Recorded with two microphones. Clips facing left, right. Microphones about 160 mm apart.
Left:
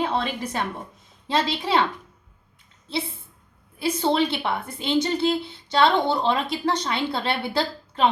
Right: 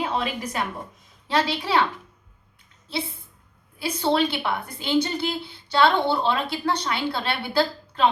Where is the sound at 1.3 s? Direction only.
20° left (ahead or behind).